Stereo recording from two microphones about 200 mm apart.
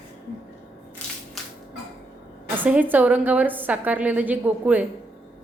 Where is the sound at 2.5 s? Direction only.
10° right (ahead or behind).